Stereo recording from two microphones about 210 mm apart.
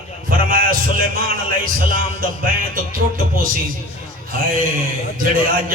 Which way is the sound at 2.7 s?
40° right (ahead or behind).